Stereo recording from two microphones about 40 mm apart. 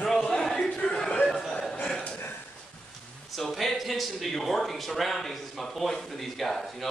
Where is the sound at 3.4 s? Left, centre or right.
Centre.